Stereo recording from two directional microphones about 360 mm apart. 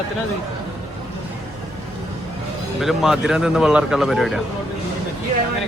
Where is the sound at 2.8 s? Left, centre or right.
Centre.